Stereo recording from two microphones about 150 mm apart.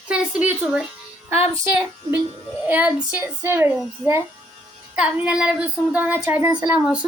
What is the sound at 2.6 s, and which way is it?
Speech, 10° right (ahead or behind).